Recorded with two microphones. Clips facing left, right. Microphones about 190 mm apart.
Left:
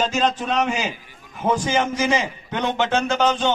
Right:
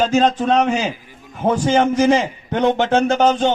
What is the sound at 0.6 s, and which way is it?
A man's voice, 50° right (ahead or behind).